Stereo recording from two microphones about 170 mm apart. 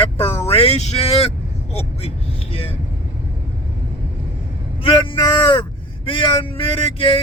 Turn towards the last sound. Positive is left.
turn(degrees=30)  # may be behind; listen again after turning